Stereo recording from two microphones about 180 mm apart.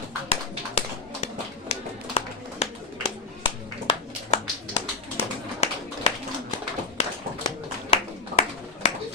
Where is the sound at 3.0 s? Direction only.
30° left (ahead or behind).